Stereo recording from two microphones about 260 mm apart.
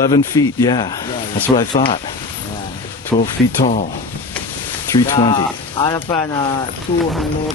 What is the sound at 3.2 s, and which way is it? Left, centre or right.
Speech, left.